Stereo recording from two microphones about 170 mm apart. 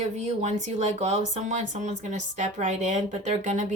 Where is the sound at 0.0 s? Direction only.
45° right (ahead or behind).